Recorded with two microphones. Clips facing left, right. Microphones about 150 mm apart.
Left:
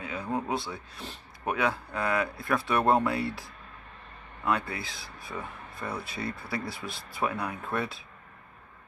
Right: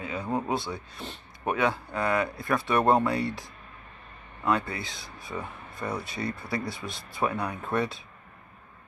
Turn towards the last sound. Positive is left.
turn(degrees=0)  # may be behind; listen again after turning